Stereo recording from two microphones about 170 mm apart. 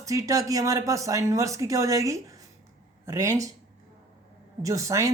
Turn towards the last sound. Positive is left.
turn(degrees=-20)  # may be behind; listen again after turning